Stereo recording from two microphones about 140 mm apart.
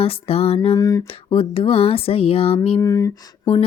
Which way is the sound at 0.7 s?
25° left (ahead or behind).